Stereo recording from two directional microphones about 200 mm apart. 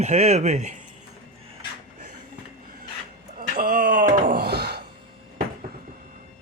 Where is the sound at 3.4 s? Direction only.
45° right (ahead or behind).